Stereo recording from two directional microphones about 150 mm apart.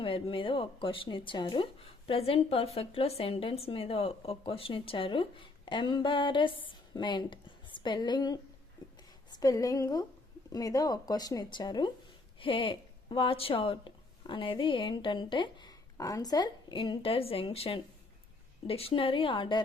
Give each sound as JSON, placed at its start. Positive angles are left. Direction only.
{"t": 0.0, "sound": "a woman's voice", "side_deg": 35}